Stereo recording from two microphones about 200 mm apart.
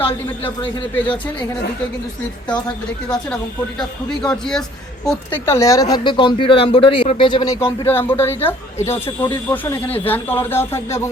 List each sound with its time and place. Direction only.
0.0 s speech: 25° left (ahead or behind)
3.8 s a man's voice: 5° left (ahead or behind); by 7.5 s 25° left (ahead or behind)
7.6 s speech: 10° left (ahead or behind)
9.0 s speech: 25° left (ahead or behind)
9.5 s speech: 10° left (ahead or behind)